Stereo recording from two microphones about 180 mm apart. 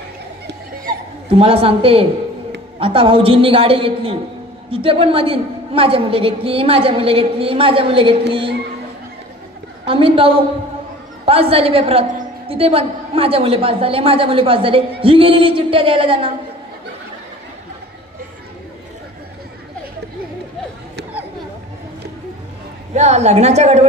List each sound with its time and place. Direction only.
1.3 s a woman's voice: 30° right (ahead or behind)
9.8 s a woman's voice: 30° right (ahead or behind)
22.9 s a woman's voice: 40° right (ahead or behind)